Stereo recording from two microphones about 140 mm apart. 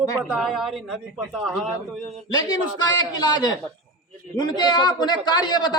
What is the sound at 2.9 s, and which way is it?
A man's voice, 30° left (ahead or behind).